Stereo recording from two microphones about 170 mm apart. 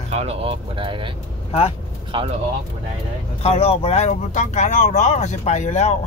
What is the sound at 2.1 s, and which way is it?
Speech, 30° right (ahead or behind).